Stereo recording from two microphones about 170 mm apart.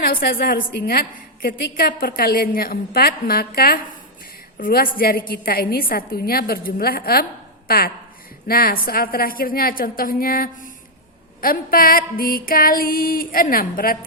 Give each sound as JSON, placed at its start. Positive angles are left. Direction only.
{"t": 0.0, "sound": "a woman's voice", "side_deg": 60}